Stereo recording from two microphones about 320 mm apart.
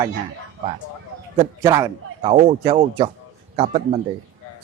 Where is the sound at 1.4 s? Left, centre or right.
Centre.